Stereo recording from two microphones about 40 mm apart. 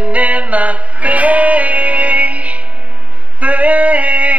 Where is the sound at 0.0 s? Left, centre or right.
Right.